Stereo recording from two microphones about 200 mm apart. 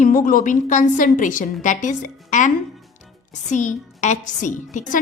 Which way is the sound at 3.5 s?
40° left (ahead or behind).